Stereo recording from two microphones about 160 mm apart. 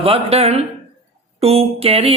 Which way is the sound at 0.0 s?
35° right (ahead or behind).